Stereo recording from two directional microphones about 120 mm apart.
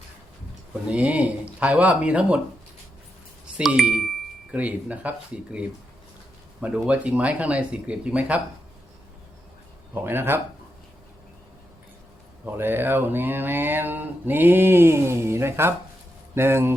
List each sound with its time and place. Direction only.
0.9 s mantra: 10° right (ahead or behind)
3.4 s speech: 5° right (ahead or behind)
4.5 s mantra: 15° right (ahead or behind)
9.9 s speech: 20° right (ahead or behind)
12.5 s mantra: 20° right (ahead or behind)
16.3 s speech: 20° right (ahead or behind)